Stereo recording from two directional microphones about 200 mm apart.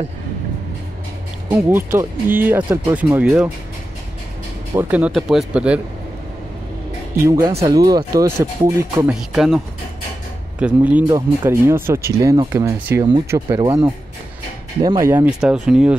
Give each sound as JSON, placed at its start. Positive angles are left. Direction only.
{"t": 1.5, "sound": "speech", "side_deg": -10}
{"t": 4.7, "sound": "speech", "side_deg": -10}
{"t": 7.2, "sound": "speech", "side_deg": -15}
{"t": 9.3, "sound": "speech", "side_deg": 0}
{"t": 10.6, "sound": "speech", "side_deg": -5}